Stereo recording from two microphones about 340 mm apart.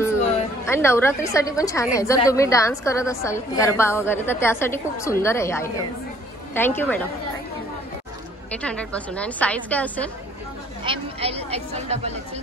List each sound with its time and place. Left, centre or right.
0.7 s a woman's voice: centre
8.5 s a woman's voice: centre
10.8 s a woman's voice: centre